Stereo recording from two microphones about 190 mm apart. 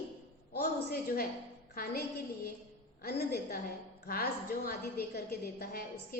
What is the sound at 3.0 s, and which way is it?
A woman's voice, 55° left (ahead or behind).